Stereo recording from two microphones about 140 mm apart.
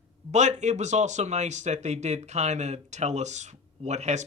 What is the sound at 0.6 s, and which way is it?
Speech, 55° right (ahead or behind).